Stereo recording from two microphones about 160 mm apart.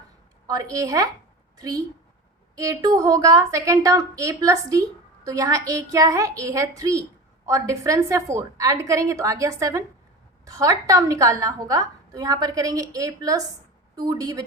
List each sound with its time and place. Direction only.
0.4 s a woman's voice: 20° right (ahead or behind)